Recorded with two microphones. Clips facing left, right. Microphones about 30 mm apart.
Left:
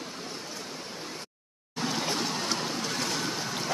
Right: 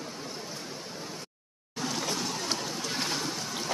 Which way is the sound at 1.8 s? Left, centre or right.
Left.